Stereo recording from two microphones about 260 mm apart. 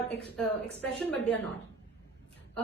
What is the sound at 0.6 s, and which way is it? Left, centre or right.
Speech, left.